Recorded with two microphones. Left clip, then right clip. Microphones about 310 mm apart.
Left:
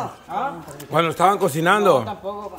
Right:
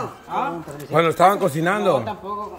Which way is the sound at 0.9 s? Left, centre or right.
Centre.